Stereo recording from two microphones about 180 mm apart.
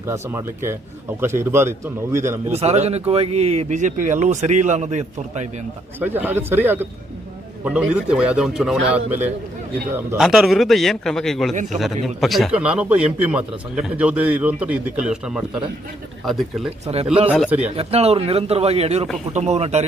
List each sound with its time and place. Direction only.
0.1 s a man's voice: 15° right (ahead or behind)
2.5 s speech: 35° right (ahead or behind)
6.0 s a man's voice: 10° right (ahead or behind)
16.8 s speech: 35° right (ahead or behind)